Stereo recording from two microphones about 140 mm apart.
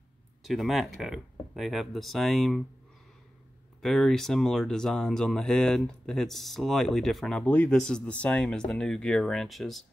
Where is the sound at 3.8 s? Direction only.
5° left (ahead or behind).